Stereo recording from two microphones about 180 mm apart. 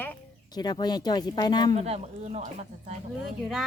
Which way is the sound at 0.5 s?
25° left (ahead or behind).